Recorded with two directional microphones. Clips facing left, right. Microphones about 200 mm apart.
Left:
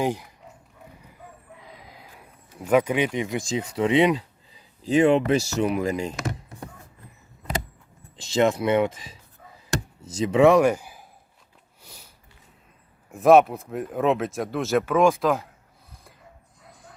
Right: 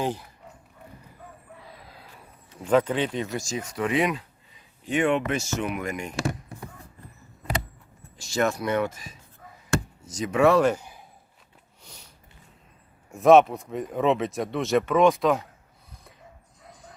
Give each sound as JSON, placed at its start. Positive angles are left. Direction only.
{"t": 0.0, "sound": "speech", "side_deg": 10}
{"t": 1.5, "sound": "a sound", "side_deg": 15}
{"t": 3.8, "sound": "speech", "side_deg": 25}
{"t": 8.1, "sound": "speech", "side_deg": 20}
{"t": 10.2, "sound": "speech", "side_deg": 25}
{"t": 11.8, "sound": "a sound", "side_deg": 5}
{"t": 13.1, "sound": "speech", "side_deg": 0}